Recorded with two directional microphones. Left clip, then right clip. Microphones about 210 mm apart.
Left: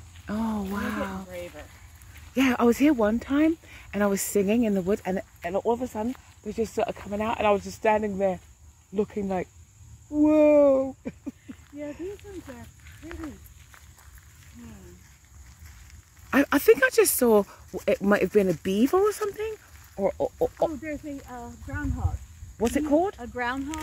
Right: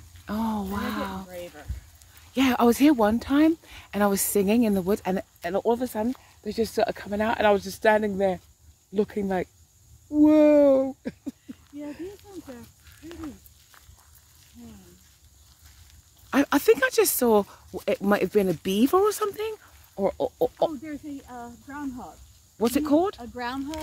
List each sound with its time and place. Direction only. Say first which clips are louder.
0.3 s a sound: right 1 dB; 5° right (ahead or behind)
1.3 s a sound: left 1 dB; 45° right (ahead or behind)
2.3 s speech: right 1 dB; 5° right (ahead or behind)
16.3 s speech: left 1 dB; centre (ahead or behind); by 21.5 s 35° right (ahead or behind)
22.8 s speech: even; 20° right (ahead or behind)
23.1 s speech: left 3 dB; 60° right (ahead or behind)